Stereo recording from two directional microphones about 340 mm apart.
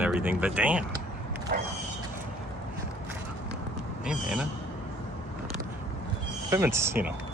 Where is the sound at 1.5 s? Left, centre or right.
Right.